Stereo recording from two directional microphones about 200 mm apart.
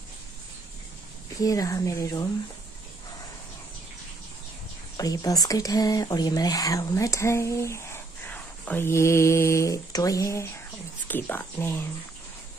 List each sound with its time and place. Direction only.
1.4 s speech: 15° left (ahead or behind)
4.9 s speech: 20° left (ahead or behind)